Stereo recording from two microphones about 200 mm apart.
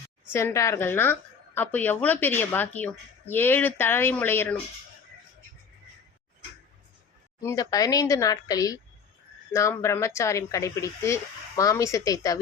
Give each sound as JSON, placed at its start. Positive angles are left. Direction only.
{"t": 0.3, "sound": "a woman's voice", "side_deg": 15}
{"t": 7.4, "sound": "a woman's voice", "side_deg": 20}